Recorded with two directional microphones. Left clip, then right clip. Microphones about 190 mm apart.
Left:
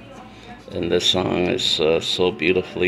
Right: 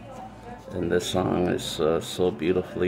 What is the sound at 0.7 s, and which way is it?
Speech, 10° right (ahead or behind).